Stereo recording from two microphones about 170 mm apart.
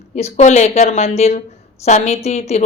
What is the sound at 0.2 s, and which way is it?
Speech, 40° left (ahead or behind).